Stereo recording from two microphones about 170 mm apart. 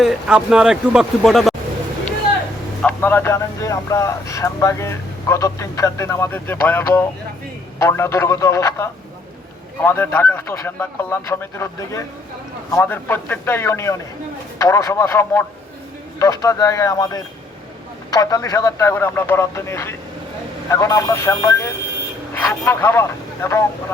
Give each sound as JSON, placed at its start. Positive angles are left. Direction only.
{"t": 0.0, "sound": "speech", "side_deg": -5}
{"t": 2.8, "sound": "speech", "side_deg": 10}